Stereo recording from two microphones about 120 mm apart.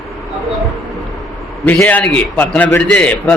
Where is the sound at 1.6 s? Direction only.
15° left (ahead or behind).